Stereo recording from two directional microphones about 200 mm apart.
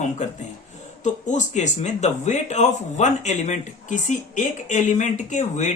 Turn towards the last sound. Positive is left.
turn(degrees=35)  # may be behind; listen again after turning